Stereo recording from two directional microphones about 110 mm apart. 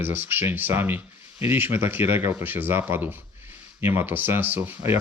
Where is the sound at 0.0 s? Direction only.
20° right (ahead or behind).